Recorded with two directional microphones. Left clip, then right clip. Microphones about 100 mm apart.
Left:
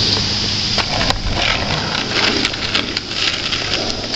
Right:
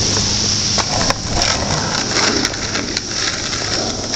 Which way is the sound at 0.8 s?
Centre (ahead or behind).